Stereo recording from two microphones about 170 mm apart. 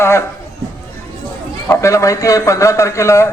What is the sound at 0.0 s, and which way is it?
Speech, 15° left (ahead or behind).